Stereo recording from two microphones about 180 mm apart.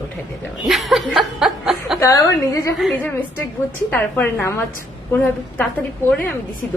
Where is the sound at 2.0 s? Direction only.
15° left (ahead or behind).